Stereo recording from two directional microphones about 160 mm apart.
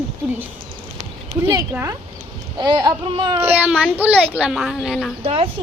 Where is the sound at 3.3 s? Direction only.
15° right (ahead or behind).